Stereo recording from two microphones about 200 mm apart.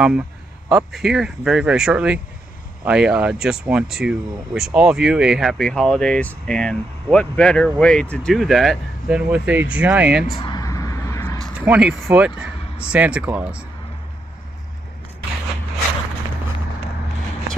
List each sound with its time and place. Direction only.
0.7 s speech: centre (ahead or behind)
10.3 s a sound: 20° left (ahead or behind); by 11.7 s 5° left (ahead or behind)
11.7 s speech: 5° right (ahead or behind)